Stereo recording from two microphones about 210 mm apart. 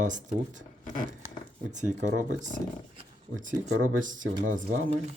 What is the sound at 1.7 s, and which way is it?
Speech, 35° right (ahead or behind).